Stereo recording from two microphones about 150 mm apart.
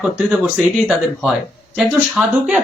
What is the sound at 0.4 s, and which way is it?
Speech, 5° right (ahead or behind).